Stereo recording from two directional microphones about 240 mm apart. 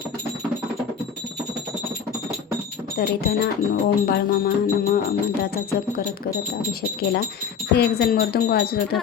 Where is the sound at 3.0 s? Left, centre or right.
Left.